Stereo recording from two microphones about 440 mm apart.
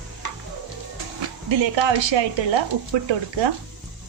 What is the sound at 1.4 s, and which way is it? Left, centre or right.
Speech, right.